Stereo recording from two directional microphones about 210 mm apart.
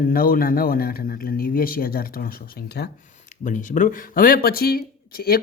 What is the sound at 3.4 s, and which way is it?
Speech, 35° left (ahead or behind).